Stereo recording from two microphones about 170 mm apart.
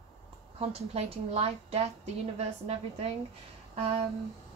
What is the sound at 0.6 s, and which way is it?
A woman's voice, 35° right (ahead or behind).